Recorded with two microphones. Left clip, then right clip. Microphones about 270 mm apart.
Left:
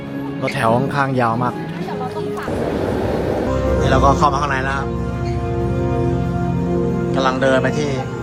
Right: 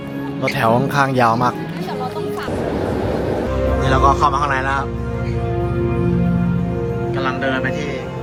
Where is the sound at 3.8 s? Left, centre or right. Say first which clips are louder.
Even; centre.